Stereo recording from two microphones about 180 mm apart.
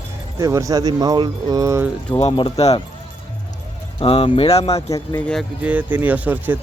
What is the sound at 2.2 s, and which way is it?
Speech, 35° left (ahead or behind).